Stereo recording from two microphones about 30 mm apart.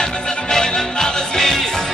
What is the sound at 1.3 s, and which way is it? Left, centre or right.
Music, centre.